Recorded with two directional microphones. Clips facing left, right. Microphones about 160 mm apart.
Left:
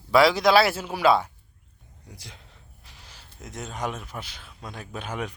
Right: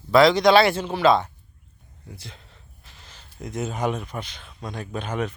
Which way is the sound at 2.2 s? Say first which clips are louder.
Right 3 dB; 15° left (ahead or behind).